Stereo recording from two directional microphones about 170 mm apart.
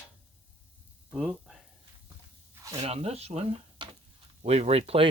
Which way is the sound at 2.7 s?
35° right (ahead or behind).